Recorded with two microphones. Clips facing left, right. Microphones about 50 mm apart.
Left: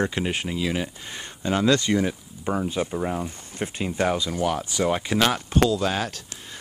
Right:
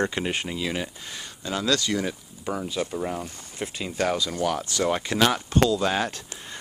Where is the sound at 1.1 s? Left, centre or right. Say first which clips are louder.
Left 6 dB; left.